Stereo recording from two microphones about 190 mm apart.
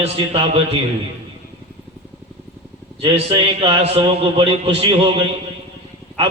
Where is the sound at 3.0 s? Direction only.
30° right (ahead or behind).